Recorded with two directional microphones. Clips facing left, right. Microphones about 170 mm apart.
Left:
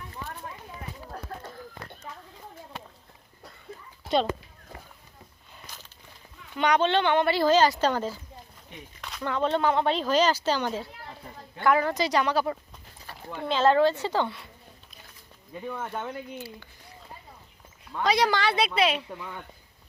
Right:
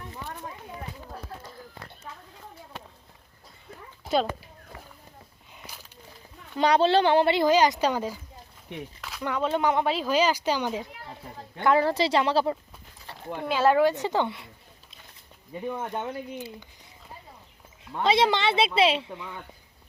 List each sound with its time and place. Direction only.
6.6 s speech: 35° right (ahead or behind)
7.3 s speech: 20° right (ahead or behind)
9.0 s a sound: centre (ahead or behind)
9.2 s speech: 10° right (ahead or behind)
11.6 s speech: 30° right (ahead or behind)
13.4 s speech: 10° right (ahead or behind)
15.6 s speech: 15° right (ahead or behind)
17.9 s speech: 25° right (ahead or behind)